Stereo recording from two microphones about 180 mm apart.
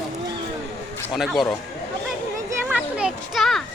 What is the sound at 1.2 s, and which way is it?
Speech, centre (ahead or behind).